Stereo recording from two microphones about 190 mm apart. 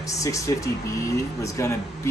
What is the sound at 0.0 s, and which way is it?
Speech, 15° left (ahead or behind).